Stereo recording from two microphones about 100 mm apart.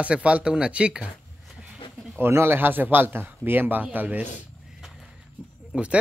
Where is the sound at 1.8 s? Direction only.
60° left (ahead or behind).